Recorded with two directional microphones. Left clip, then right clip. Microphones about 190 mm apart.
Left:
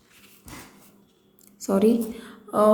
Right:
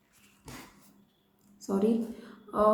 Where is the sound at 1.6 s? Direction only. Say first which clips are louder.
Left 8 dB; 35° left (ahead or behind).